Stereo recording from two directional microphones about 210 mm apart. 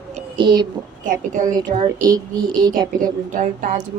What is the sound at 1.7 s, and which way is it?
Speech, 20° right (ahead or behind).